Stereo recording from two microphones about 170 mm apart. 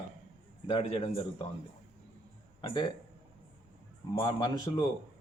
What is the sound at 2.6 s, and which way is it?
Speech, 30° left (ahead or behind).